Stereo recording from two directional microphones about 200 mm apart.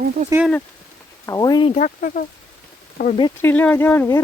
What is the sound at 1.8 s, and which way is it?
Speech, 40° left (ahead or behind).